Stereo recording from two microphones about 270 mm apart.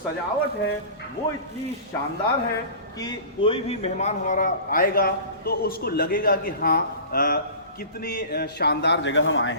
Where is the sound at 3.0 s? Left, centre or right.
Centre.